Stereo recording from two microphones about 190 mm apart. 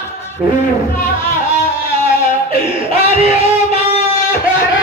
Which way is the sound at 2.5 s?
30° right (ahead or behind).